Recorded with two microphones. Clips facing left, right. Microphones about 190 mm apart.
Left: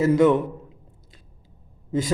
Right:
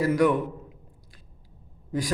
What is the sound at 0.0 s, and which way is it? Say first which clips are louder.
Speech: left 4 dB; 25° left (ahead or behind).